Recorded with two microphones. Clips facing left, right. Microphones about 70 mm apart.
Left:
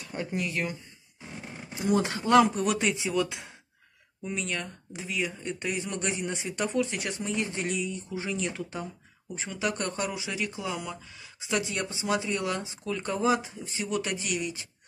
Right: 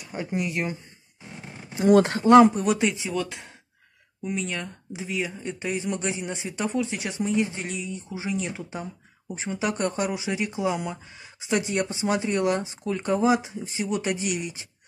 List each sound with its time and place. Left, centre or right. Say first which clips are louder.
0.0 s speech: right 3 dB; centre
1.8 s speech: right 8 dB; right
2.2 s speech: right 6 dB; right
2.5 s speech: right 3 dB; centre
10.1 s speech: right 5 dB; right
13.1 s speech: right 5 dB; centre